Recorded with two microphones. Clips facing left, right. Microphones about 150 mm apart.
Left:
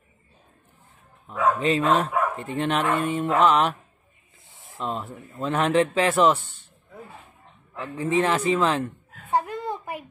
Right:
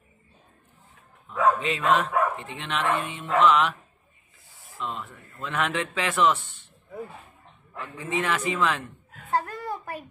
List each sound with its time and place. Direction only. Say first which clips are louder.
1.6 s speech: left 3 dB; 35° left (ahead or behind)
4.6 s a sound: left 2 dB; 20° left (ahead or behind)
4.8 s speech: left 4 dB; 40° left (ahead or behind)
5.1 s speech: left 8 dB; 15° left (ahead or behind)
5.4 s speech: left 7 dB; 35° left (ahead or behind)
7.8 s speech: left 6 dB; 35° left (ahead or behind)
9.3 s a sound: left 2 dB; 20° left (ahead or behind)